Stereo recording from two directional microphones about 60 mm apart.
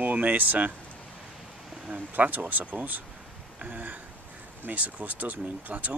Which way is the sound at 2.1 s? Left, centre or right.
Right.